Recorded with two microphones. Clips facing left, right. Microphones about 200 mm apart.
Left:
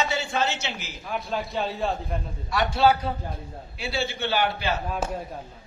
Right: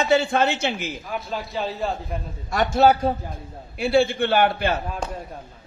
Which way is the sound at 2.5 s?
45° right (ahead or behind).